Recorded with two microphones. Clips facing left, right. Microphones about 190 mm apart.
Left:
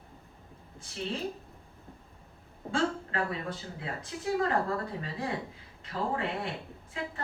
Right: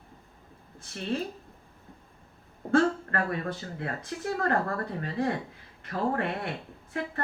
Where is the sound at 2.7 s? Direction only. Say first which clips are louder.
Right 6 dB; 60° right (ahead or behind).